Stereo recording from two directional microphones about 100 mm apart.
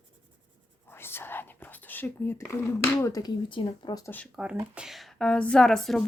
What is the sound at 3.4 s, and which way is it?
Speech, 55° left (ahead or behind).